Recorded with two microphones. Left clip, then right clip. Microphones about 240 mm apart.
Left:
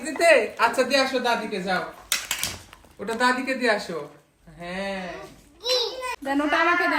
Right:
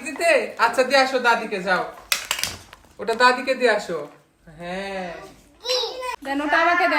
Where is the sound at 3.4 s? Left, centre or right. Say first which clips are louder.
Right 4 dB; right.